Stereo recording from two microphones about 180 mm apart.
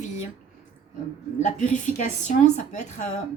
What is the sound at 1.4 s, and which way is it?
A woman's voice, 45° left (ahead or behind).